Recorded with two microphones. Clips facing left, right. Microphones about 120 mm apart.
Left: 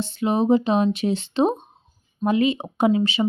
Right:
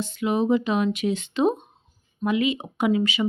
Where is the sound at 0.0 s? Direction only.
30° left (ahead or behind).